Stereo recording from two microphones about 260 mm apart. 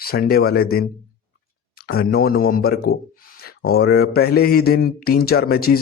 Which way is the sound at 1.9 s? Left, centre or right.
Left.